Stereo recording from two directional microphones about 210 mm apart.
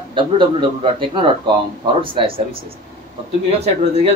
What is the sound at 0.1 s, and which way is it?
A man's voice, 20° right (ahead or behind).